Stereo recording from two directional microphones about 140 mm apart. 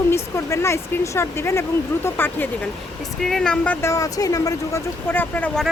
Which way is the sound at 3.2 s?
Centre (ahead or behind).